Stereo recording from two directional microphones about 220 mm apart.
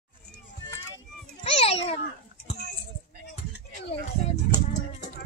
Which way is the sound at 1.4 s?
25° left (ahead or behind).